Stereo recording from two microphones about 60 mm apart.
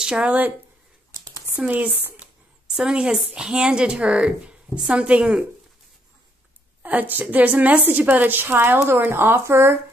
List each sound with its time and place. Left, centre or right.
0.0 s speech: centre
1.7 s a woman's voice: right
2.7 s a woman's voice: centre
6.8 s a woman's voice: right